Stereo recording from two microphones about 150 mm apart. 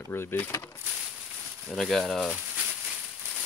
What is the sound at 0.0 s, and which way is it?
Speech, 15° left (ahead or behind).